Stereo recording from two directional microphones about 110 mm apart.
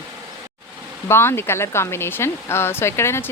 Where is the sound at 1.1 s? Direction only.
20° left (ahead or behind).